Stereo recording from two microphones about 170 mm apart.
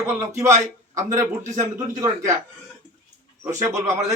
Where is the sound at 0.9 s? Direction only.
20° right (ahead or behind).